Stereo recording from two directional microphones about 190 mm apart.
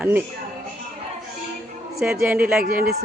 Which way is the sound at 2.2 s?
10° right (ahead or behind).